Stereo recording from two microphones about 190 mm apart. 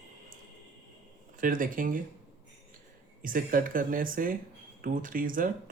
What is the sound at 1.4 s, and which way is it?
Speech, 45° right (ahead or behind).